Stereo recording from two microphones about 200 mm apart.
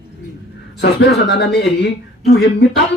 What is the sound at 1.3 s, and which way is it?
Speech, 60° left (ahead or behind).